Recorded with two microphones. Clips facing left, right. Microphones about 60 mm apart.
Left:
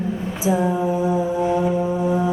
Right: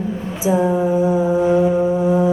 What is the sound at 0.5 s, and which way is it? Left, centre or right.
Music, centre.